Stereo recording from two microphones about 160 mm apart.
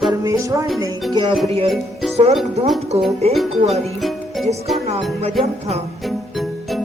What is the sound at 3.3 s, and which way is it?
Speech, centre (ahead or behind).